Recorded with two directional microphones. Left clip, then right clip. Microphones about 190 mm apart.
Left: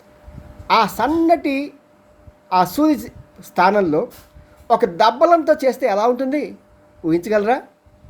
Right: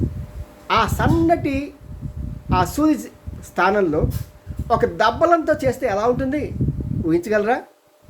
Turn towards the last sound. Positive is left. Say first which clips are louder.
# left 2 dB
turn(degrees=15)  # may be behind; listen again after turning